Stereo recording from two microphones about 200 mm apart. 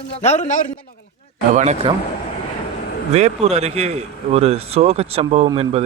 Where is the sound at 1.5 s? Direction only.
35° right (ahead or behind).